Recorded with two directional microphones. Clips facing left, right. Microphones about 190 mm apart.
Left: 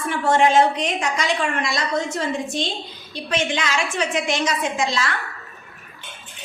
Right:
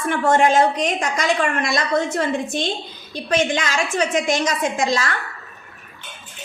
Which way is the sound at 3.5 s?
45° right (ahead or behind).